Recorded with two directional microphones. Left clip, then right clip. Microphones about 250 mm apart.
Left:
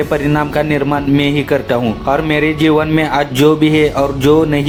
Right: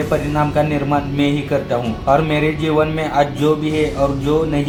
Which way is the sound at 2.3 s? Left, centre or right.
Left.